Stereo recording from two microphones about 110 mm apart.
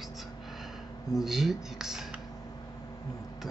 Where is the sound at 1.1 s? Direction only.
5° right (ahead or behind).